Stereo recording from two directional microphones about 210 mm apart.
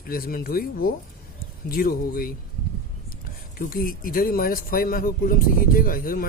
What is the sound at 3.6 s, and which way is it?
Speech, 45° left (ahead or behind).